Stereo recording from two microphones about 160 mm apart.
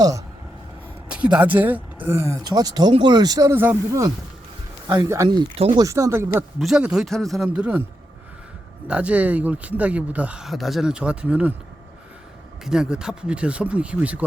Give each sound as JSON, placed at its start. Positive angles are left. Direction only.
{"t": 1.0, "sound": "speech", "side_deg": -5}
{"t": 5.5, "sound": "speech", "side_deg": -35}
{"t": 5.8, "sound": "speech", "side_deg": -20}
{"t": 6.6, "sound": "speech", "side_deg": -5}
{"t": 8.9, "sound": "speech", "side_deg": -10}
{"t": 12.6, "sound": "speech", "side_deg": -5}